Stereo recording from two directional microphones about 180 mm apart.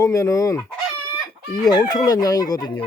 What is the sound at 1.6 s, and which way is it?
Chicken, 20° left (ahead or behind).